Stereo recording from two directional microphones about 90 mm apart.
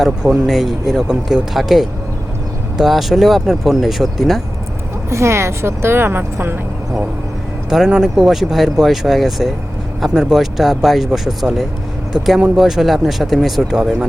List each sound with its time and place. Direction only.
0.0 s speech: 5° right (ahead or behind)
5.0 s a woman's voice: 30° right (ahead or behind)
7.7 s speech: 5° right (ahead or behind)